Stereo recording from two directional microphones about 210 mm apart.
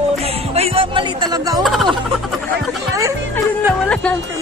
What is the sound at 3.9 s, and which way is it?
Speech, 5° left (ahead or behind).